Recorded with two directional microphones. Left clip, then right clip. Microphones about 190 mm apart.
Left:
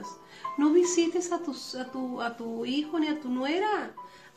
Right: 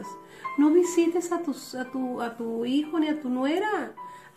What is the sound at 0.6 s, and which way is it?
A woman's voice, 15° right (ahead or behind).